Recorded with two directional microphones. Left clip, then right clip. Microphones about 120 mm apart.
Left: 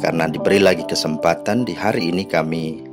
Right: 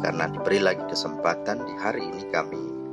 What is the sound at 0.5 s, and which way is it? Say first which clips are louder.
Speech: left 8 dB; 90° left.